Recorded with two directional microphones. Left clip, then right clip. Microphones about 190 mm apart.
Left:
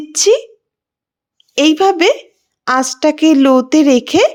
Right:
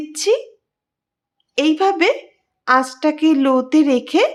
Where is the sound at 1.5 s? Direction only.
30° left (ahead or behind).